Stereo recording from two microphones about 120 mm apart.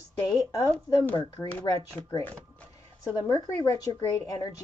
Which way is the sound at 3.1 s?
30° left (ahead or behind).